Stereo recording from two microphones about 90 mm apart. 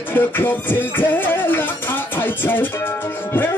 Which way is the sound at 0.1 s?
25° left (ahead or behind).